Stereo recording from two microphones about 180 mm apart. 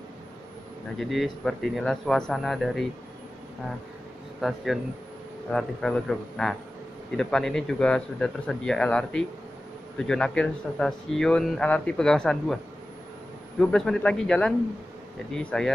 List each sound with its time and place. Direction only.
0.9 s speech: centre (ahead or behind)
4.4 s speech: centre (ahead or behind)
13.6 s speech: 5° left (ahead or behind)